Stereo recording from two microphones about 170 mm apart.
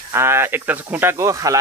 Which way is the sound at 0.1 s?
15° right (ahead or behind).